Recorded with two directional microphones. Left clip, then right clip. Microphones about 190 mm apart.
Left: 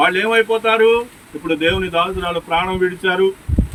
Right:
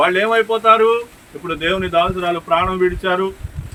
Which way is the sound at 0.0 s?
20° right (ahead or behind).